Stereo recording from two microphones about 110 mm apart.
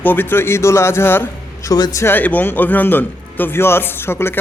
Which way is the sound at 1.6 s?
35° left (ahead or behind).